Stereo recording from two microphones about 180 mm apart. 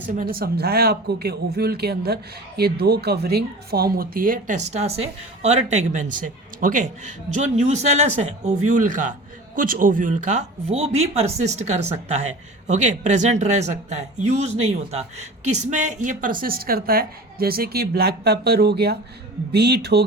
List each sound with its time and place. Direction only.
0.2 s a woman's voice: 55° right (ahead or behind)